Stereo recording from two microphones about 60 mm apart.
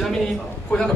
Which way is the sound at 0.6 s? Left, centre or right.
Centre.